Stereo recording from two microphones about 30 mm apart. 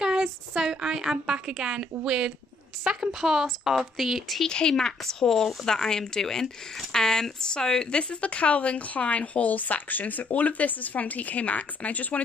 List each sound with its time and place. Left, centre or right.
0.0 s a woman's voice: right
2.9 s a woman's voice: centre
4.5 s speech: left
8.2 s speech: left